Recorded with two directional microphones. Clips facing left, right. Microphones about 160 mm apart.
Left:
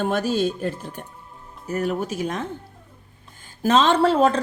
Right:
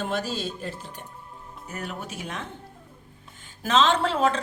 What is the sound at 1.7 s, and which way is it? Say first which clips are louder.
Speech: left 11 dB; 40° left (ahead or behind).